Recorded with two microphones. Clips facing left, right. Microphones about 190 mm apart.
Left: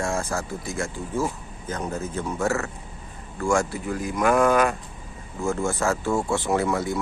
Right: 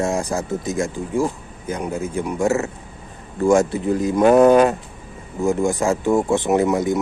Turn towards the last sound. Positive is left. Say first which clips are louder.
# right 6 dB
turn(degrees=-20)  # may be behind; listen again after turning